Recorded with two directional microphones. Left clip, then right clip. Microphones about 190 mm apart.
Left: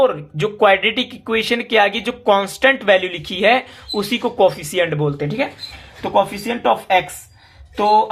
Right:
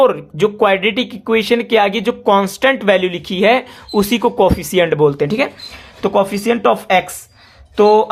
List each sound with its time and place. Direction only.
0.0 s speech: 35° right (ahead or behind); by 8.1 s 55° right (ahead or behind)